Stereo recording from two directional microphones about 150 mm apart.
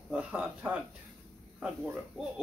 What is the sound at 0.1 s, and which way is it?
Speech, 5° right (ahead or behind).